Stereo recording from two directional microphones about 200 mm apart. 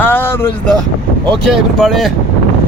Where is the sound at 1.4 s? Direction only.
Centre (ahead or behind).